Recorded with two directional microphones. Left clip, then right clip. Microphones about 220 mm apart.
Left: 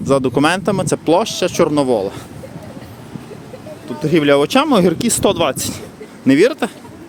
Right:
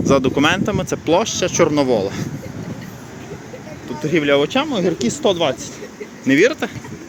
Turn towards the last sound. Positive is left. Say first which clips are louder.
# left 2 dB
turn(degrees=25)  # may be behind; listen again after turning